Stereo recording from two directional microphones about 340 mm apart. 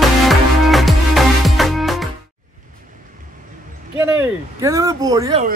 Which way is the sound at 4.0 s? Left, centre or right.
Centre.